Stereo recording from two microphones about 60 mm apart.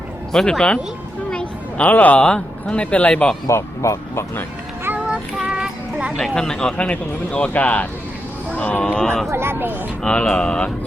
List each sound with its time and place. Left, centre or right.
0.3 s speech: centre
1.8 s speech: left
3.5 s speech: left
4.9 s child singing: centre
6.3 s speech: centre
8.9 s speech: centre
9.3 s speech: right
10.0 s speech: centre